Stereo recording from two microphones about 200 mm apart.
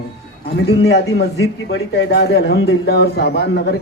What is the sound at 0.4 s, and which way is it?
A man's voice, 55° left (ahead or behind).